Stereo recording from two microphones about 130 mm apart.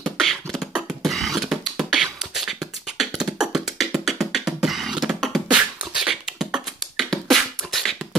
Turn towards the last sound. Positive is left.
turn(degrees=0)  # may be behind; listen again after turning